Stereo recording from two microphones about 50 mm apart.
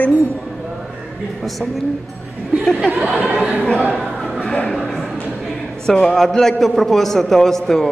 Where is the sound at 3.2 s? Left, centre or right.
Right.